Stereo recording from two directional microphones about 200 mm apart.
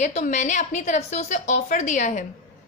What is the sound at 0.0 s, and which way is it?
A woman's voice, 35° left (ahead or behind).